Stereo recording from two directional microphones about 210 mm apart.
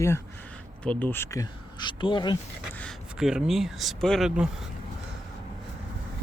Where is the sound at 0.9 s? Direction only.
10° left (ahead or behind).